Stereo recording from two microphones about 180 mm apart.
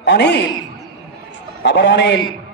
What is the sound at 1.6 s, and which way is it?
Speech, 75° left (ahead or behind).